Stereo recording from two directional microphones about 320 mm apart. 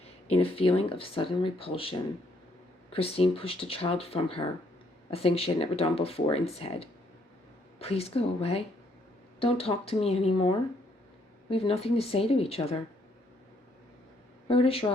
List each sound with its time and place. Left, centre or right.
0.3 s speech: centre
14.4 s speech: centre